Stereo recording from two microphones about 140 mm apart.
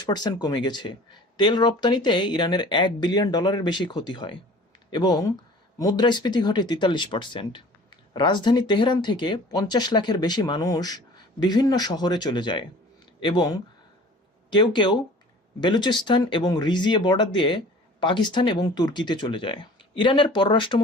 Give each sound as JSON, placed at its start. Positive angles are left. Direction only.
{"t": 0.0, "sound": "speech", "side_deg": 30}